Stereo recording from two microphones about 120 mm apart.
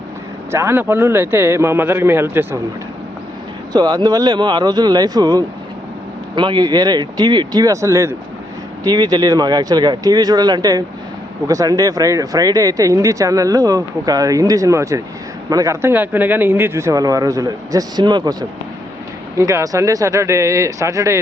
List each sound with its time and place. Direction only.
0.5 s speech: 20° right (ahead or behind)
3.7 s speech: 35° right (ahead or behind)